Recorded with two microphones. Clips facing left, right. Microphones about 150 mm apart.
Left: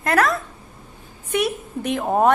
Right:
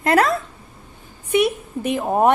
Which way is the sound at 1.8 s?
5° right (ahead or behind).